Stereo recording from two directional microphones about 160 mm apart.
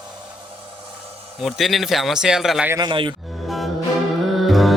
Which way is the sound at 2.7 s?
25° right (ahead or behind).